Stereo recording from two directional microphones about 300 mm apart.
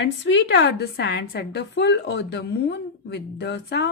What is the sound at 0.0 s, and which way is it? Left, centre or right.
A woman's voice, left.